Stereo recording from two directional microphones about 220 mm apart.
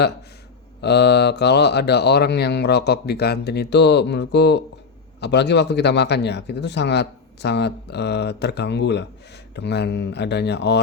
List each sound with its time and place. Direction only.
0.8 s a man's voice: 50° left (ahead or behind)